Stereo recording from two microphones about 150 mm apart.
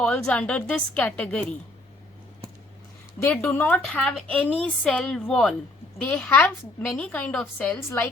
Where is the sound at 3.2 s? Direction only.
15° left (ahead or behind).